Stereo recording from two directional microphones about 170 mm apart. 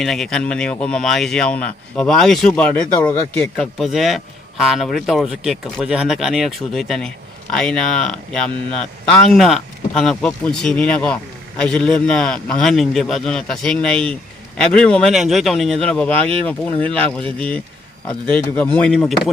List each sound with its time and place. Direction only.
0.0 s speech: centre (ahead or behind)
18.3 s speech: 10° left (ahead or behind)